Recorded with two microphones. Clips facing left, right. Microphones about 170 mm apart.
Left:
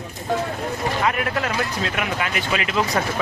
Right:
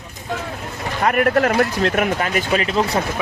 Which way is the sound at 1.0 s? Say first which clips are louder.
Right 11 dB; 50° right (ahead or behind).